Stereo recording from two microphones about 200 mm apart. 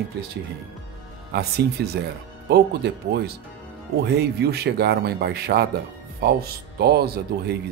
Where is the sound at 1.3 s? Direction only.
55° right (ahead or behind).